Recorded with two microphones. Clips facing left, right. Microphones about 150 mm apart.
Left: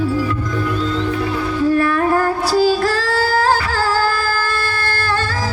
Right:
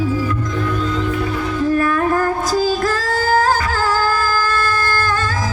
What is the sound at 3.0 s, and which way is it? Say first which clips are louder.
Singing: right 1 dB; 45° right (ahead or behind).